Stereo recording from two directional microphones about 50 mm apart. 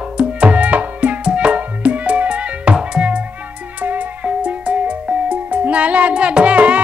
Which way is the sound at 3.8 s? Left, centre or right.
Right.